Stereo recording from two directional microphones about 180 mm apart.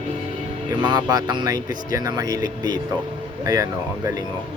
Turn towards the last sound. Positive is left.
turn(degrees=-20)  # may be behind; listen again after turning